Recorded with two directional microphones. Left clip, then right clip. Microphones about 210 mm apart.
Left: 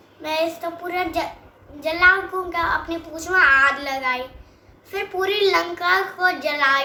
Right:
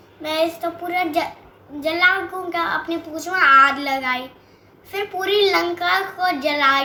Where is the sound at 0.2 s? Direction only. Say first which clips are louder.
Right 2 dB; 15° left (ahead or behind).